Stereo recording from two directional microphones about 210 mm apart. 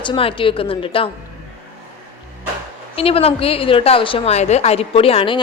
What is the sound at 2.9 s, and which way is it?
A woman's voice, 25° left (ahead or behind).